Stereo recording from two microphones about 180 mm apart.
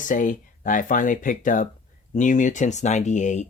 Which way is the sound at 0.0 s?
45° left (ahead or behind).